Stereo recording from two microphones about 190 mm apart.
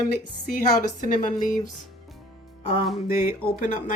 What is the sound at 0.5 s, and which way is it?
Speech, 45° left (ahead or behind).